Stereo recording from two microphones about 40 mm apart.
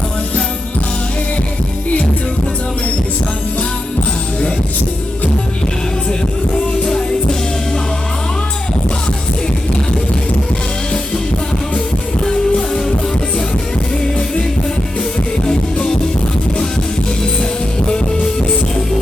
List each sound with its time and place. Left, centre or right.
6.8 s music: centre
12.2 s music: centre